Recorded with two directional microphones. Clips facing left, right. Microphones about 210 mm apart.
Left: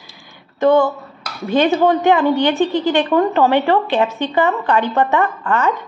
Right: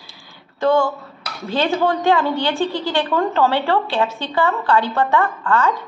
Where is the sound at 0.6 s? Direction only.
20° left (ahead or behind).